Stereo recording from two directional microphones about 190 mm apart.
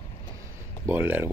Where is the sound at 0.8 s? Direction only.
10° right (ahead or behind).